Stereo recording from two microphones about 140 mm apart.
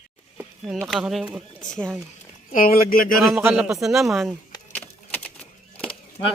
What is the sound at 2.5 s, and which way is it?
Speech, 90° left.